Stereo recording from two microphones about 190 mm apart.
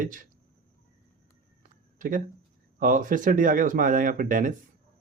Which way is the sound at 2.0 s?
45° right (ahead or behind).